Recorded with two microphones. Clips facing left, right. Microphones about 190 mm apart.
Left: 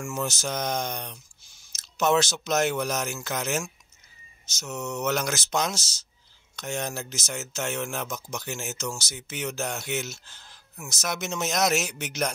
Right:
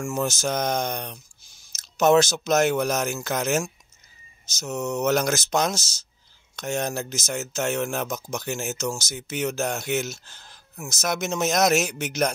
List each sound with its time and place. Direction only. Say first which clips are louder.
0.0 s speech: right 5 dB; 40° right (ahead or behind)